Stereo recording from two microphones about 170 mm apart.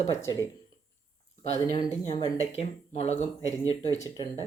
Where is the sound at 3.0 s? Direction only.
40° left (ahead or behind).